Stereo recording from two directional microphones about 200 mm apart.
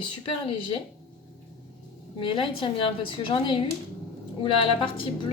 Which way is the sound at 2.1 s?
25° left (ahead or behind).